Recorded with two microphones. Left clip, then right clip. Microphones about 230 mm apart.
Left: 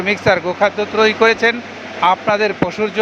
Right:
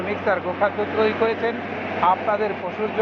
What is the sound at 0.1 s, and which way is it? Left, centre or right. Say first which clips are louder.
Speech: left 8 dB; left.